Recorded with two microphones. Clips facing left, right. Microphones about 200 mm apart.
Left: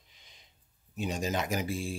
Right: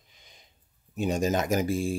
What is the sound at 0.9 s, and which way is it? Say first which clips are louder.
Speech: right 6 dB; 45° right (ahead or behind).